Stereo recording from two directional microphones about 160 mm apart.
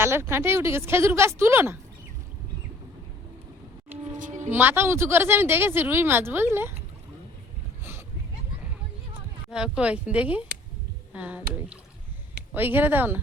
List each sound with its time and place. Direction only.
0.0 s speech: 15° right (ahead or behind)
4.2 s a sound: 50° right (ahead or behind)
4.5 s speech: 15° right (ahead or behind)
9.5 s speech: 5° right (ahead or behind)
12.5 s speech: 10° right (ahead or behind)